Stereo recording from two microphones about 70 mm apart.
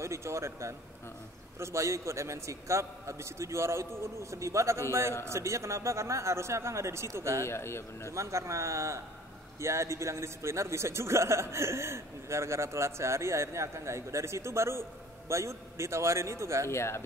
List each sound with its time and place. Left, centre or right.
0.0 s a man's voice: right
7.4 s a man's voice: left
8.1 s a man's voice: right
16.6 s a man's voice: left